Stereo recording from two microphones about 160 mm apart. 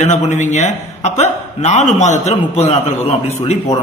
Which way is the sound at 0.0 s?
50° left (ahead or behind).